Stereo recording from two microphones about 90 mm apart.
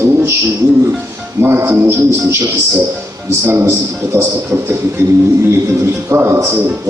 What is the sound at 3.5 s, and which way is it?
A man's voice, 30° right (ahead or behind).